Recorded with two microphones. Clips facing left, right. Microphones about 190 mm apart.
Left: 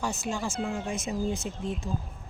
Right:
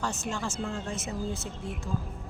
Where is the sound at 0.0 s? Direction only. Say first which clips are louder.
Left 2 dB; 10° left (ahead or behind).